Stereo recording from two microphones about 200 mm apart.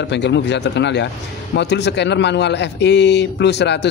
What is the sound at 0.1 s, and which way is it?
Speech, 60° left (ahead or behind).